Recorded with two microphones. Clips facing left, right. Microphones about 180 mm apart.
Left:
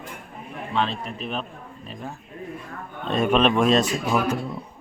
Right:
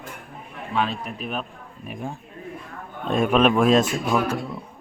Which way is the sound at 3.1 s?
5° right (ahead or behind).